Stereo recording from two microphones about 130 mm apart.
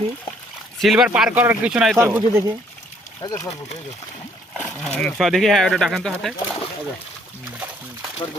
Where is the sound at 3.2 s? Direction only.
25° left (ahead or behind).